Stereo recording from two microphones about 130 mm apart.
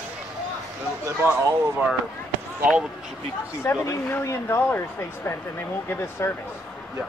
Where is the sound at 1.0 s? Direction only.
20° right (ahead or behind).